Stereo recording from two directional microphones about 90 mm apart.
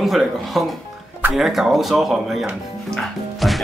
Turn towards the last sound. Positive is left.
turn(degrees=0)  # may be behind; listen again after turning